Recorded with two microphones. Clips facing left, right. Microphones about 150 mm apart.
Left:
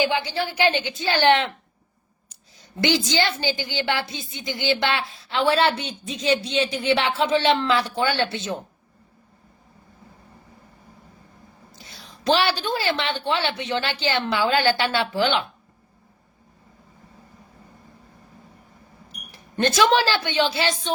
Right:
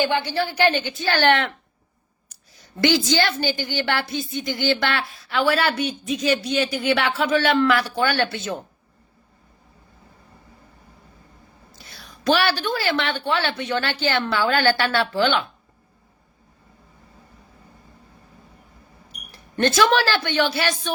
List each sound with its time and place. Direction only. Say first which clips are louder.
0.0 s a woman's voice: right 1 dB; 15° left (ahead or behind)
11.7 s a woman's voice: right 1 dB; 20° left (ahead or behind)
19.3 s speech: right 2 dB; 15° left (ahead or behind)